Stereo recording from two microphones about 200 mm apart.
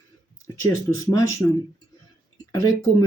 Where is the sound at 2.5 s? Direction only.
15° left (ahead or behind).